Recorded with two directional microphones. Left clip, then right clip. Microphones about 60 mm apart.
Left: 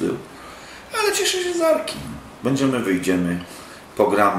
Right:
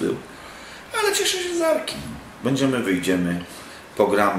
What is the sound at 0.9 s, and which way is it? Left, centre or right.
A woman's voice, centre.